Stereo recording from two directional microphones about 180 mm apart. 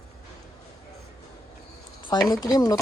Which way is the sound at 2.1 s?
20° left (ahead or behind).